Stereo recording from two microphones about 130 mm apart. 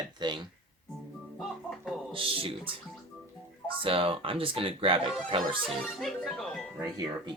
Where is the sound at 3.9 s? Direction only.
45° right (ahead or behind).